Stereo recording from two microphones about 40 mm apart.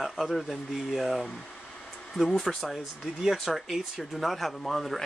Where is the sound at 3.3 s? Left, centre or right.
Centre.